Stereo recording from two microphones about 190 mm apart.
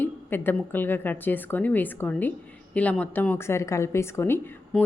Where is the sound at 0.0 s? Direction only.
10° left (ahead or behind).